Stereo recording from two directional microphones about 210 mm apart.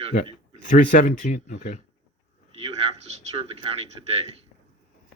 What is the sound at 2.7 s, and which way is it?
A man's voice, 30° right (ahead or behind).